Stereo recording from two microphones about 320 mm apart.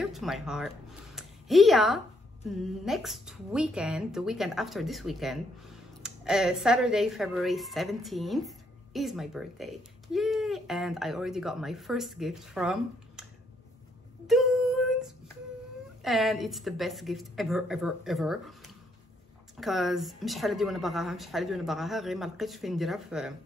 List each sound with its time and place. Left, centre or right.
0.0 s a woman's voice: centre
14.2 s a sound: centre
16.0 s a woman's voice: centre
19.5 s a woman's voice: centre